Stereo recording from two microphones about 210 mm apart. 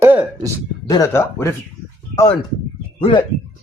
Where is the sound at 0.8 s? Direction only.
15° left (ahead or behind).